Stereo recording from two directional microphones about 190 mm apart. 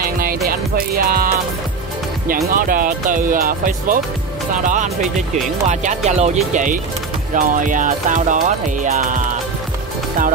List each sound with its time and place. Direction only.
0.0 s music: 50° right (ahead or behind)
2.2 s speech: 50° right (ahead or behind)